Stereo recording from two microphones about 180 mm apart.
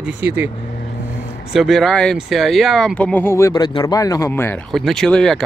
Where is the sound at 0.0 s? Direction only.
10° right (ahead or behind).